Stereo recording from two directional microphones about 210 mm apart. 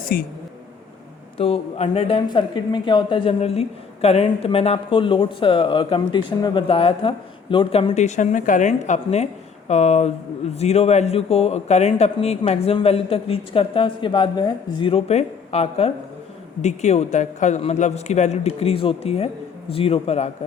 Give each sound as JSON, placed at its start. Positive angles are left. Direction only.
{"t": 0.0, "sound": "speech", "side_deg": 45}
{"t": 1.4, "sound": "a man's voice", "side_deg": 30}